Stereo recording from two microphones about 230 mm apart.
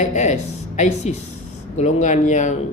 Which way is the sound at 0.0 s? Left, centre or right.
Left.